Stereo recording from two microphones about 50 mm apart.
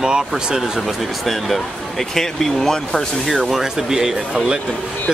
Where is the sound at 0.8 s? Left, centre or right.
Centre.